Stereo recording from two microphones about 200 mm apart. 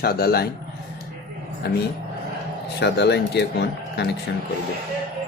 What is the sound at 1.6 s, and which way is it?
Speech, 50° left (ahead or behind).